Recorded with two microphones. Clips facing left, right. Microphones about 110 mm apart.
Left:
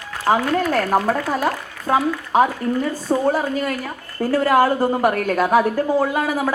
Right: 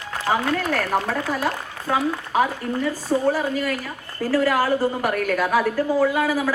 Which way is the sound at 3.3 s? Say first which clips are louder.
Left 2 dB; 25° left (ahead or behind).